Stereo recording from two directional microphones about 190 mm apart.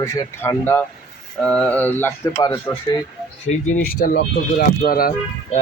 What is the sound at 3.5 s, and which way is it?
Speech, 40° left (ahead or behind).